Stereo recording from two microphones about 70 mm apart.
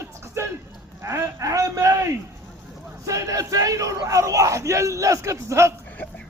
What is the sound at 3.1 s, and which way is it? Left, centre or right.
Speech, right.